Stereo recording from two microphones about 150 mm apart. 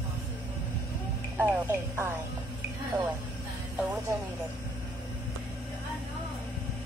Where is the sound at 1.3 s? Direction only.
15° right (ahead or behind).